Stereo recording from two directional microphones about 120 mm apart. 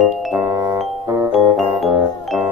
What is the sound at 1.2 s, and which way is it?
Music, centre (ahead or behind).